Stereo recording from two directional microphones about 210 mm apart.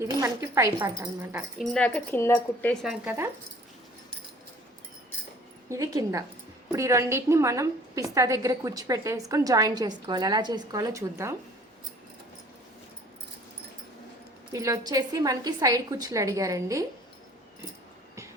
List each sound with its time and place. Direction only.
0.0 s a woman's voice: 15° right (ahead or behind)
1.5 s a woman's voice: centre (ahead or behind)
2.9 s a woman's voice: 10° right (ahead or behind)
5.6 s a woman's voice: 15° right (ahead or behind)
14.5 s a woman's voice: 15° right (ahead or behind)